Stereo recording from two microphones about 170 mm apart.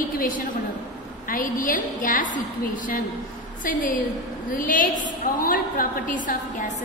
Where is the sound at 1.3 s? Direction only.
55° left (ahead or behind).